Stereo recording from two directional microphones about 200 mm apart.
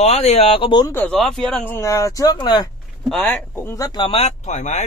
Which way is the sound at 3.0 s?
5° left (ahead or behind).